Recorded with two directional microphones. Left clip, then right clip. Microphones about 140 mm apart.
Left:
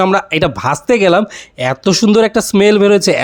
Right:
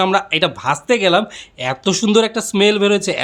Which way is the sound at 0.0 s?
55° left (ahead or behind).